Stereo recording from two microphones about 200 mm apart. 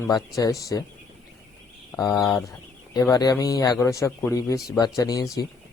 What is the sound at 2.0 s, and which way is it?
Speech, 15° left (ahead or behind).